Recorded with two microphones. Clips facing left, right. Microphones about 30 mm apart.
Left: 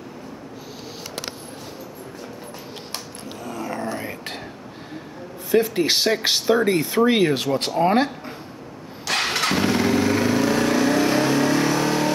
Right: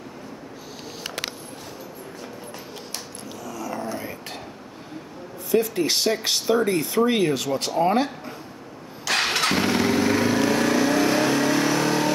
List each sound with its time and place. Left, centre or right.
3.4 s whispering: left
5.5 s speech: left
9.2 s motorcycle: centre
10.0 s vehicle: centre